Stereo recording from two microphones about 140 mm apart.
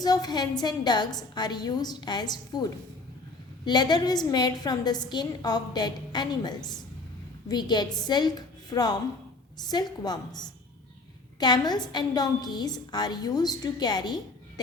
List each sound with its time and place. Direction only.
0.0 s a woman's voice: 30° left (ahead or behind)